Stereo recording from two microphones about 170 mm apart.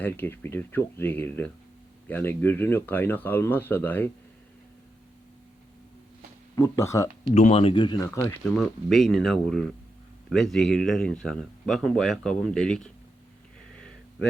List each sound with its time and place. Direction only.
0.0 s speech: 10° left (ahead or behind)
6.6 s speech: 15° left (ahead or behind)
7.3 s speech: 40° left (ahead or behind); by 8.4 s 20° left (ahead or behind)
8.5 s a man's voice: centre (ahead or behind)
13.7 s a sound: 5° left (ahead or behind)